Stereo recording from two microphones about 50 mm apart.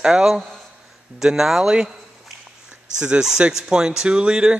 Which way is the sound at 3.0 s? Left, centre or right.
Centre.